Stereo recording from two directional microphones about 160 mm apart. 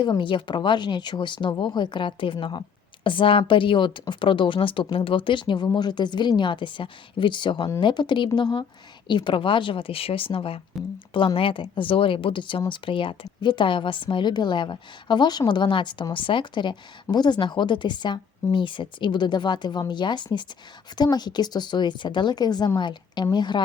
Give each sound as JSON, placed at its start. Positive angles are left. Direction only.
{"t": 0.0, "sound": "a woman's voice", "side_deg": 30}